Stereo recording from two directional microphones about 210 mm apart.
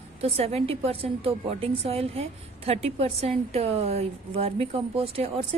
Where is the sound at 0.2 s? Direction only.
30° right (ahead or behind).